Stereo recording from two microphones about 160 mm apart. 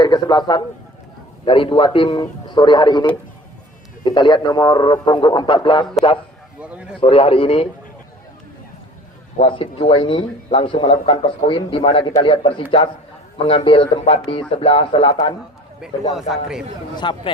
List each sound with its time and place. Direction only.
0.0 s a man's voice: 25° left (ahead or behind)
6.6 s a man's voice: 10° right (ahead or behind)
7.0 s speech: 35° left (ahead or behind)
9.4 s speech: 35° left (ahead or behind)
15.8 s a man's voice: 5° right (ahead or behind)
17.0 s speech: 30° left (ahead or behind)